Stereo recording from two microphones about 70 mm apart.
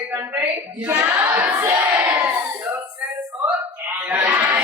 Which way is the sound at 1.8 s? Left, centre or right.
Right.